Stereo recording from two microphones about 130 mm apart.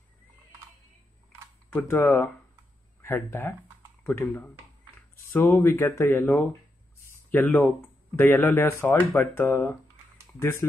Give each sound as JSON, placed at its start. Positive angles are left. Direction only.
{"t": 1.7, "sound": "speech", "side_deg": 15}
{"t": 5.3, "sound": "speech", "side_deg": 15}